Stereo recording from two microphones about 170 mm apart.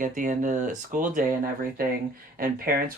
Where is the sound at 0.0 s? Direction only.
50° right (ahead or behind).